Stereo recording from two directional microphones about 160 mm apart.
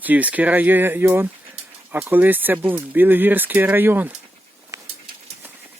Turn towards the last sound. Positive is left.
turn(degrees=-20)  # may be behind; listen again after turning